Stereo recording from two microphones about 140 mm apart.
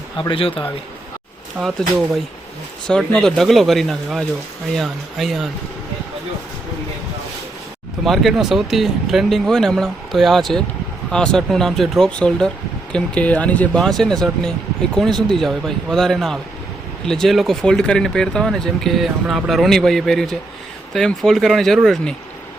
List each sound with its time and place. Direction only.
0.2 s speech: 40° left (ahead or behind)
1.6 s speech: 5° right (ahead or behind)
2.8 s speech: 5° left (ahead or behind)
8.0 s speech: centre (ahead or behind)